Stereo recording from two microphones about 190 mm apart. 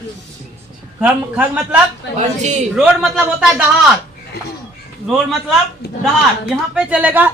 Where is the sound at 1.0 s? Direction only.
10° right (ahead or behind).